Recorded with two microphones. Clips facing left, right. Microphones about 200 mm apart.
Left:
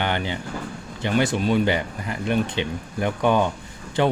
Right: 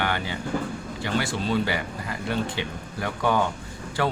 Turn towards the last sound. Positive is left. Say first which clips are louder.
# left 5 dB
turn(degrees=20)  # may be behind; listen again after turning